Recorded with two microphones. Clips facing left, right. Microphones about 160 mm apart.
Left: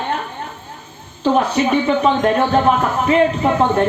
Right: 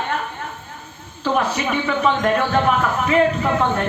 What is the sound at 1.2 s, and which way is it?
A man's voice, 30° left (ahead or behind).